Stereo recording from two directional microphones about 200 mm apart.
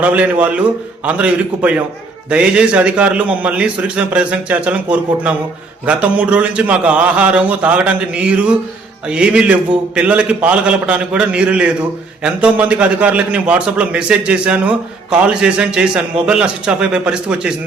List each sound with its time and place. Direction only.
0.0 s a man's voice: 5° right (ahead or behind)